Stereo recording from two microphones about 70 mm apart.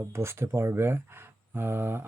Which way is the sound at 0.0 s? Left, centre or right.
Right.